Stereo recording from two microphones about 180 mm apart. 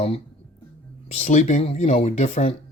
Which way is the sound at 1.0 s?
40° left (ahead or behind).